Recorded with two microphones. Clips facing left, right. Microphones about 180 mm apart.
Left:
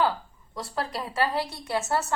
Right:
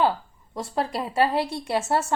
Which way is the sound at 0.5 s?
25° right (ahead or behind).